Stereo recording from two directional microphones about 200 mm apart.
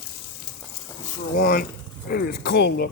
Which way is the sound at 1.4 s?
45° left (ahead or behind).